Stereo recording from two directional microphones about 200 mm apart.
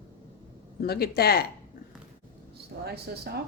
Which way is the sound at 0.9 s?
50° left (ahead or behind).